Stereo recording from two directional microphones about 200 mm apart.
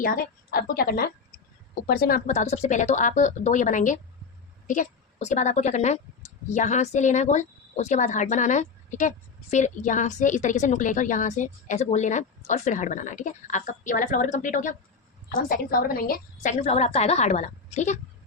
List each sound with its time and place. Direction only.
0.0 s a woman's voice: 45° left (ahead or behind)